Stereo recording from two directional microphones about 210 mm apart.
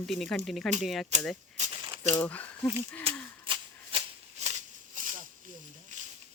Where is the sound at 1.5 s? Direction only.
30° right (ahead or behind).